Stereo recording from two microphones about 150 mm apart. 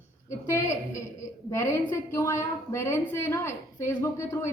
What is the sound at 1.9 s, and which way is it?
A woman's voice, 20° left (ahead or behind).